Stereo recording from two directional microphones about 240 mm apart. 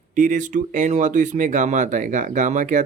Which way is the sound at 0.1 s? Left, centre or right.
Right.